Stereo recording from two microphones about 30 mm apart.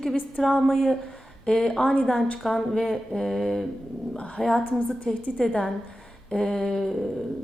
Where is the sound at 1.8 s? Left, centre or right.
Left.